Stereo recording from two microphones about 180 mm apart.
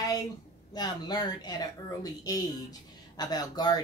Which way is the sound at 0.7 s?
25° left (ahead or behind).